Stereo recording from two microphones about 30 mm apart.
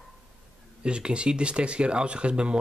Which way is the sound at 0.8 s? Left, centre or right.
Right.